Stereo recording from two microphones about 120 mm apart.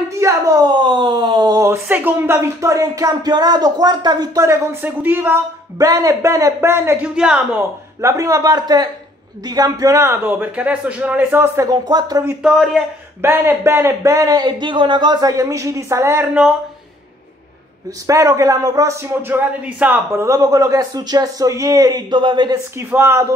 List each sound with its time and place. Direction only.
0.1 s a sound: 25° right (ahead or behind)
1.6 s speech: 20° right (ahead or behind)
4.8 s a man's voice: 15° right (ahead or behind)
5.8 s a man's voice: 30° right (ahead or behind)
11.6 s speech: 35° right (ahead or behind)
12.4 s a man's voice: 5° right (ahead or behind)
13.2 s speech: 20° right (ahead or behind)
18.0 s speech: 25° right (ahead or behind)
22.8 s speech: 20° right (ahead or behind)